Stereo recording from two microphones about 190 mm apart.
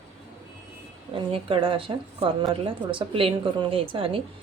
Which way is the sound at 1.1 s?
25° right (ahead or behind).